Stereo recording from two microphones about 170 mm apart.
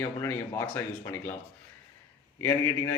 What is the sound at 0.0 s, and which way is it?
Speech, 10° left (ahead or behind).